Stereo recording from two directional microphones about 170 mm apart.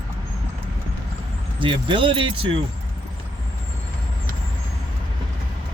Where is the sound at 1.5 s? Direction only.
30° right (ahead or behind).